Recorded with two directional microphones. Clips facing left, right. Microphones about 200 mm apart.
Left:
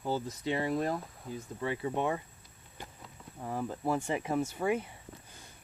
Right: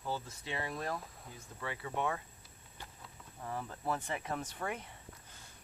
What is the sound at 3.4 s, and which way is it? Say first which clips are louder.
Speech: left 6 dB; 15° left (ahead or behind).